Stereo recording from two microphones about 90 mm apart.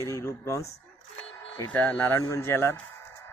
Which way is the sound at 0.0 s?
35° left (ahead or behind).